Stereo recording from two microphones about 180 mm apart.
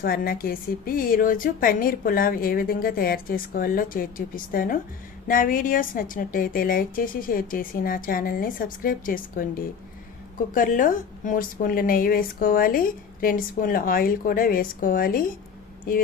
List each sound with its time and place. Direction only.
0.0 s a woman's voice: 55° left (ahead or behind)